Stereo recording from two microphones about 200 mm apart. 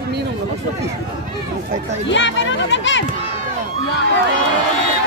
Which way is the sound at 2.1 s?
65° left (ahead or behind).